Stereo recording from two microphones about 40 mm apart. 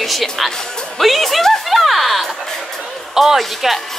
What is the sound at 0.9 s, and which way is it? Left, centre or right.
Music, centre.